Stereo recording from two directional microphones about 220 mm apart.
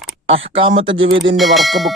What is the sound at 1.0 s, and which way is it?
Speech, 55° right (ahead or behind).